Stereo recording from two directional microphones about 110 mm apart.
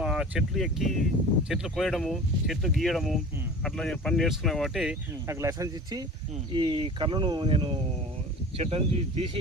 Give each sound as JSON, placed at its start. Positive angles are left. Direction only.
{"t": 0.0, "sound": "speech", "side_deg": -5}
{"t": 5.3, "sound": "speech", "side_deg": -30}
{"t": 8.5, "sound": "speech", "side_deg": -60}